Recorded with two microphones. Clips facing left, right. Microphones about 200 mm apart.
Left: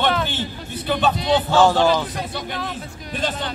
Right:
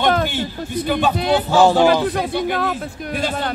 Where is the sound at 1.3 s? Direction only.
10° right (ahead or behind).